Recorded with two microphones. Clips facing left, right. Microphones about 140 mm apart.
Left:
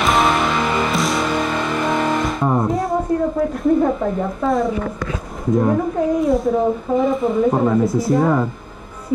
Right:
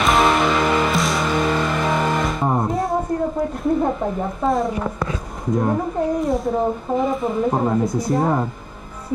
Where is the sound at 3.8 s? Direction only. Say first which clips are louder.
Left 3 dB; 5° right (ahead or behind).